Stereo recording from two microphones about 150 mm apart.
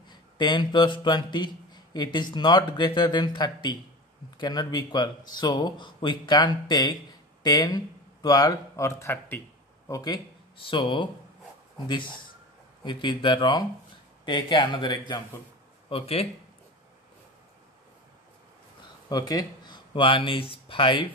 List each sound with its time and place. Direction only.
0.1 s speech: 30° left (ahead or behind)
12.8 s speech: 30° left (ahead or behind)
19.0 s speech: 25° left (ahead or behind)